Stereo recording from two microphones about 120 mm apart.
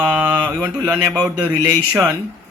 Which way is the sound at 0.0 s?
15° right (ahead or behind).